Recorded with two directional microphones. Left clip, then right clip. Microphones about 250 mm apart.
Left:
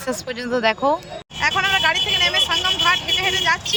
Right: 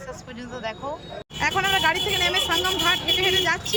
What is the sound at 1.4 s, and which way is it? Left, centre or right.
Speech, centre.